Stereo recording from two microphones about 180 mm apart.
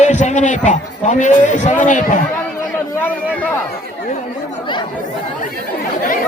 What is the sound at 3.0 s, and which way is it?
Speech, 10° left (ahead or behind).